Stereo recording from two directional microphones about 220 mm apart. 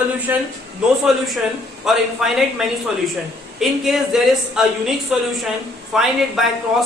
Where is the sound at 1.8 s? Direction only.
Centre (ahead or behind).